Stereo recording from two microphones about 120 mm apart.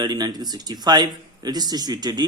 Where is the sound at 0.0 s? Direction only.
35° right (ahead or behind).